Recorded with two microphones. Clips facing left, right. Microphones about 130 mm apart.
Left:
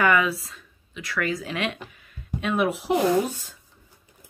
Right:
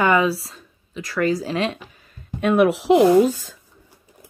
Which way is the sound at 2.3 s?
50° right (ahead or behind).